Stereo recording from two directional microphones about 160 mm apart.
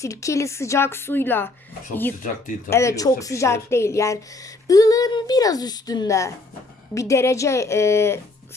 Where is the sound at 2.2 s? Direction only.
55° left (ahead or behind).